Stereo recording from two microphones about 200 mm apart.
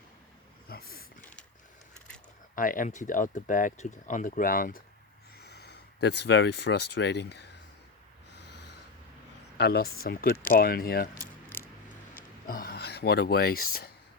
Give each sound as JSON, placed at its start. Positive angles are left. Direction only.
{"t": 0.7, "sound": "a sound", "side_deg": 50}
{"t": 1.2, "sound": "mechanisms", "side_deg": 5}
{"t": 2.6, "sound": "speech", "side_deg": 40}
{"t": 8.4, "sound": "snort", "side_deg": 60}
{"t": 9.6, "sound": "speech", "side_deg": 55}
{"t": 11.4, "sound": "a sound", "side_deg": 10}
{"t": 12.5, "sound": "speech", "side_deg": 50}